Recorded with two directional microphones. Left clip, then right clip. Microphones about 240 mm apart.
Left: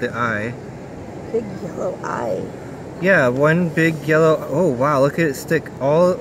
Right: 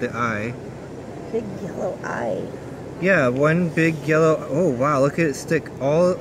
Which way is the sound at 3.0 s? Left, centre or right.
Centre.